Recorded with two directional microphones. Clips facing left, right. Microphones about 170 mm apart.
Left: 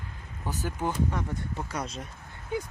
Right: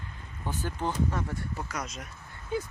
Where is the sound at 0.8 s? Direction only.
15° left (ahead or behind); by 2.1 s 30° left (ahead or behind).